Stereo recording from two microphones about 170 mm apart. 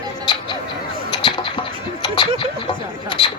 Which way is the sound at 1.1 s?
25° left (ahead or behind).